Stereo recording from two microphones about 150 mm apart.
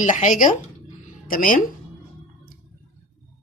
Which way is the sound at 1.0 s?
70° left (ahead or behind).